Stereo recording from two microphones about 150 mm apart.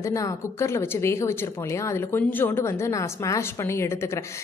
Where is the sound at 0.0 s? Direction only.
20° left (ahead or behind).